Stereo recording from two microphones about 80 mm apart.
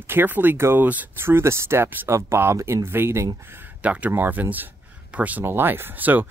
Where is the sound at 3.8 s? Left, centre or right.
Centre.